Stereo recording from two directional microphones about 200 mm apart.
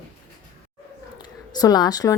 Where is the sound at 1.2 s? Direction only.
20° left (ahead or behind).